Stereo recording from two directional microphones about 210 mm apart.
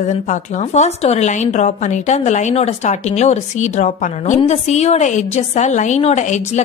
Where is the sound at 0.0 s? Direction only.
35° left (ahead or behind).